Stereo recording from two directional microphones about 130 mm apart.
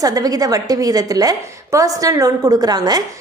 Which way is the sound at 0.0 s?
30° right (ahead or behind).